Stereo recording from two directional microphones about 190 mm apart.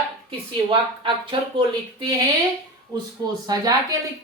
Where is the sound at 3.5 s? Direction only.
20° right (ahead or behind).